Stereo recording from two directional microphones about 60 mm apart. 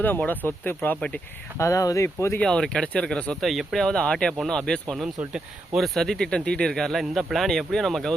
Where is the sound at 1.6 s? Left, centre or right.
Left.